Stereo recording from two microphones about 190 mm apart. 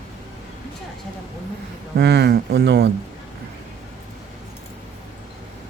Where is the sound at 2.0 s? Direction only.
60° right (ahead or behind).